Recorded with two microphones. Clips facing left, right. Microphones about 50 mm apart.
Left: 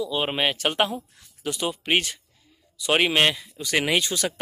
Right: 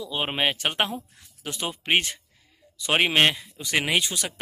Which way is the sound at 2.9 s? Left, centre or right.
Centre.